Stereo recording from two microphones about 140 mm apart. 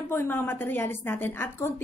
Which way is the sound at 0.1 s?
15° left (ahead or behind).